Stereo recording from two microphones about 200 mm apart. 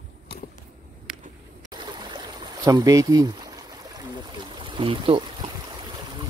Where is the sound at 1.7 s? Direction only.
20° right (ahead or behind).